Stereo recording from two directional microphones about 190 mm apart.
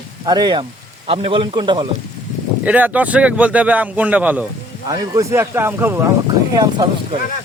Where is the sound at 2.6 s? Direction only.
10° right (ahead or behind).